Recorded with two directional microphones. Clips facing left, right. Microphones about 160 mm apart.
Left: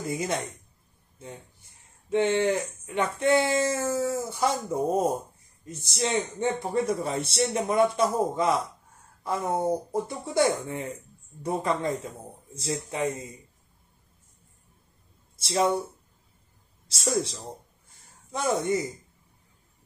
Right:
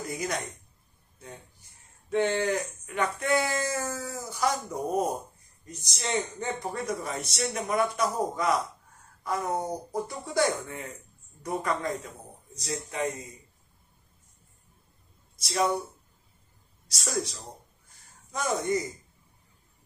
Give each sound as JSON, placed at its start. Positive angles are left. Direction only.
{"t": 0.1, "sound": "speech", "side_deg": 25}
{"t": 2.0, "sound": "speech", "side_deg": 25}
{"t": 15.3, "sound": "speech", "side_deg": 25}
{"t": 16.8, "sound": "a man's voice", "side_deg": 25}